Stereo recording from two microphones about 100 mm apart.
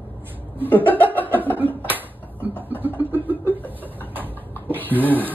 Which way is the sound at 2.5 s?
20° right (ahead or behind).